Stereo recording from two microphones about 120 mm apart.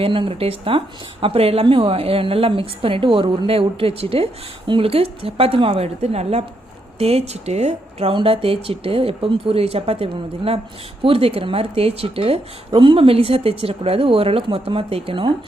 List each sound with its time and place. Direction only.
0.0 s a woman's voice: 50° right (ahead or behind)